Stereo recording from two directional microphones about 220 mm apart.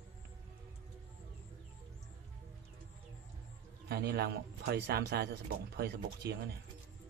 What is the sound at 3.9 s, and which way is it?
Speech, 45° right (ahead or behind).